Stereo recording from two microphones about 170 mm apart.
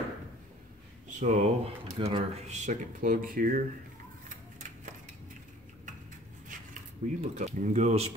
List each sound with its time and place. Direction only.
1.2 s speech: 40° right (ahead or behind); by 3.6 s 55° right (ahead or behind)
4.3 s a sound: 50° right (ahead or behind)
7.0 s speech: 50° right (ahead or behind)